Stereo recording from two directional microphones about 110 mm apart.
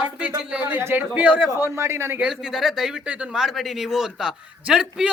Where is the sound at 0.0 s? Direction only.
10° right (ahead or behind).